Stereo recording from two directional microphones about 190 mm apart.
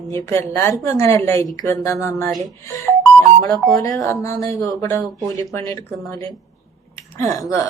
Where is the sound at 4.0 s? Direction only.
15° left (ahead or behind).